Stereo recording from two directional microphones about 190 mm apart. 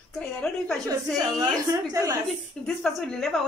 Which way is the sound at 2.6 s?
5° left (ahead or behind).